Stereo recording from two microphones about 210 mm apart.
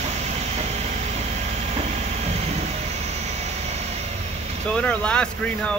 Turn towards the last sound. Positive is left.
turn(degrees=5)  # may be behind; listen again after turning